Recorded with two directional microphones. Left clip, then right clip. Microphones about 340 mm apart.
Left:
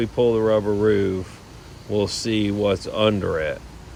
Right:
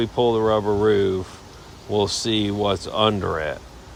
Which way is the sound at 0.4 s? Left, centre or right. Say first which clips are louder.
Even; centre.